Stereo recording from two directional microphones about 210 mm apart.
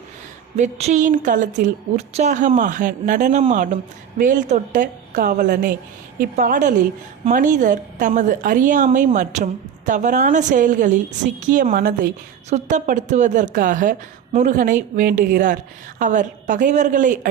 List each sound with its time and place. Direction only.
0.5 s a woman's voice: 30° right (ahead or behind)